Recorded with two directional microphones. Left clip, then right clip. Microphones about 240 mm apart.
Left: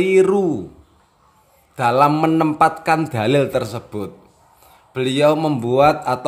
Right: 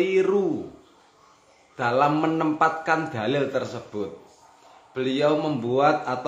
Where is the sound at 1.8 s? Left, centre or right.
Left.